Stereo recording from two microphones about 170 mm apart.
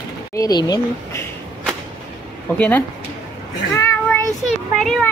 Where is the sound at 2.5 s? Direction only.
10° left (ahead or behind).